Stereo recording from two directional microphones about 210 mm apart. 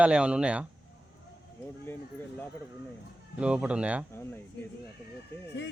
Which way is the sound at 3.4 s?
5° right (ahead or behind).